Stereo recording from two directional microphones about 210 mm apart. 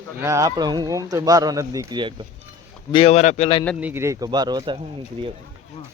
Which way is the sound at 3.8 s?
10° right (ahead or behind).